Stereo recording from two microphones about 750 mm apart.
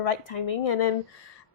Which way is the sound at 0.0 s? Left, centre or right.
Left.